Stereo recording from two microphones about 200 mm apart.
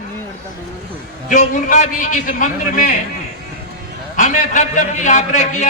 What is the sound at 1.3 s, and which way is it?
A man's voice, 40° left (ahead or behind).